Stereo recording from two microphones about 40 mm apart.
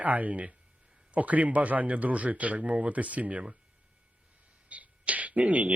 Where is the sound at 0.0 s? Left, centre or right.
Right.